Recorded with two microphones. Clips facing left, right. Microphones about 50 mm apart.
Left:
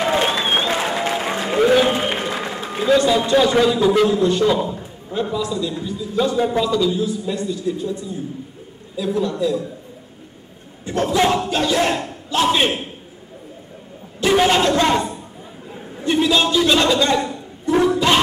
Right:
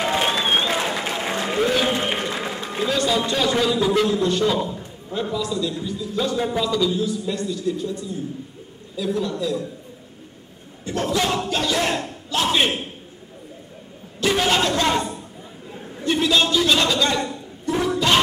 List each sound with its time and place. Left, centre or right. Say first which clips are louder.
0.0 s applause: left 3 dB; centre
2.3 s a sound: left 2 dB; centre
3.1 s a man's voice: left 5 dB; centre
7.0 s a man's voice: left 2 dB; centre
10.9 s a man's voice: left 5 dB; centre
14.2 s a man's voice: left 4 dB; centre